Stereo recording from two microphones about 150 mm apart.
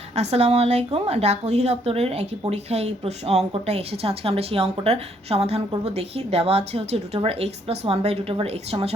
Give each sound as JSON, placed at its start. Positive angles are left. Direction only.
{"t": 0.2, "sound": "speech", "side_deg": -45}